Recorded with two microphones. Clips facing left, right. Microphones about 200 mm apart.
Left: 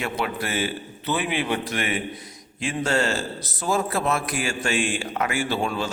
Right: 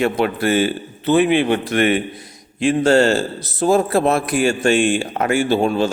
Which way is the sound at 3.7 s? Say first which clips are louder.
Right 9 dB; 60° right (ahead or behind).